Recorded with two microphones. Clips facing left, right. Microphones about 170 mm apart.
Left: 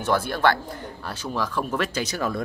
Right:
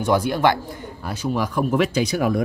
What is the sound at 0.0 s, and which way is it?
Speech, 15° right (ahead or behind).